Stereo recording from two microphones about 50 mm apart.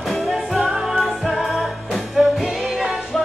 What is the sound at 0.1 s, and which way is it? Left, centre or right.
Music, centre.